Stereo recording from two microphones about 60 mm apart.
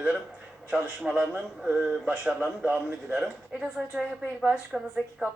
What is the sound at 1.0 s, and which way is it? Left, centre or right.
Speech, centre.